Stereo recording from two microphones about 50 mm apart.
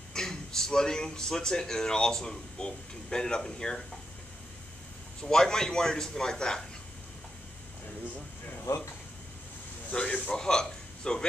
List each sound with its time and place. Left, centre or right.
0.1 s a man's voice: centre
5.2 s a man's voice: centre
8.7 s speech: left
9.8 s a man's voice: left